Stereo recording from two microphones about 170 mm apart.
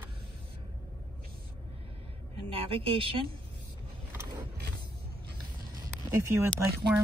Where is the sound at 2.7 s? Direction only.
30° right (ahead or behind).